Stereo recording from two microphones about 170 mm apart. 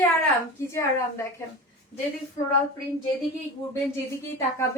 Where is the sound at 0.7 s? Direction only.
15° left (ahead or behind).